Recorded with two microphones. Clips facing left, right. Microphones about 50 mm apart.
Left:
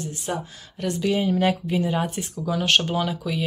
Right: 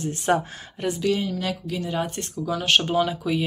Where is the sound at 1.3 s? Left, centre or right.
Left.